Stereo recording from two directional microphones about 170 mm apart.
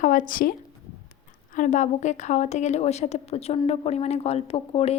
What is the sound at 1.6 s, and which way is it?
A woman's voice, 45° left (ahead or behind).